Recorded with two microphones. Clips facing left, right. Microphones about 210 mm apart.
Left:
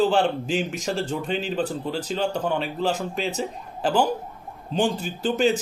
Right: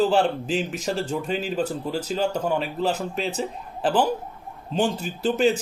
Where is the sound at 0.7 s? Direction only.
40° right (ahead or behind).